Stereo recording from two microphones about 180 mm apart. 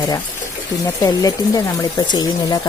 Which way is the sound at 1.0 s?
20° left (ahead or behind).